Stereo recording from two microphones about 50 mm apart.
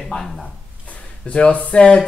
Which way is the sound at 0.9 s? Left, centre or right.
Left.